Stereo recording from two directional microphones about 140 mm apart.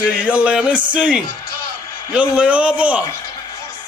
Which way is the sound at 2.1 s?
10° right (ahead or behind).